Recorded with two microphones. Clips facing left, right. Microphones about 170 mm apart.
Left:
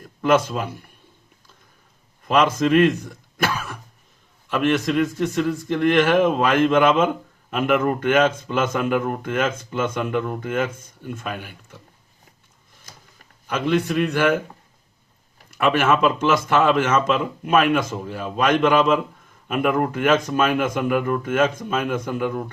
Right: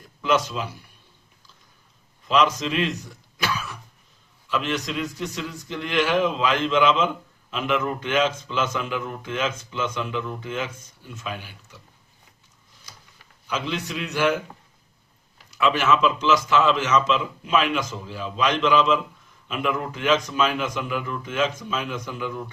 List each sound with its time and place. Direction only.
0.2 s a man's voice: 55° left (ahead or behind)
2.2 s a man's voice: 50° left (ahead or behind)
13.5 s a man's voice: 50° left (ahead or behind)
15.4 s a man's voice: 55° left (ahead or behind)